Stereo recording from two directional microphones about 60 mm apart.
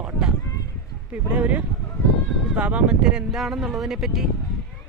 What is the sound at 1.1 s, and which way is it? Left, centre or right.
Speech, right.